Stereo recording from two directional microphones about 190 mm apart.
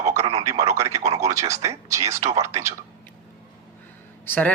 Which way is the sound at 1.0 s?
35° right (ahead or behind).